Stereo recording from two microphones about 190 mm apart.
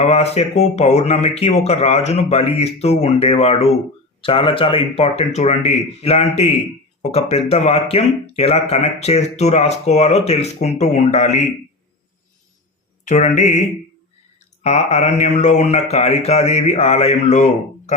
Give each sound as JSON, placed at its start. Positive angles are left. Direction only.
{"t": 0.0, "sound": "speech", "side_deg": 35}
{"t": 13.1, "sound": "speech", "side_deg": 40}